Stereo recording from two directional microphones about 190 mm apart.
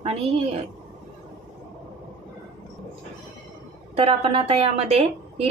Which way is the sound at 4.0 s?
30° right (ahead or behind).